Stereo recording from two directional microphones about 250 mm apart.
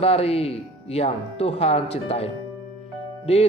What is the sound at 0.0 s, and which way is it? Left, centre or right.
A man's voice, left.